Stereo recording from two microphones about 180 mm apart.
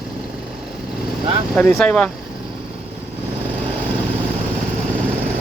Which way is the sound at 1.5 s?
5° left (ahead or behind).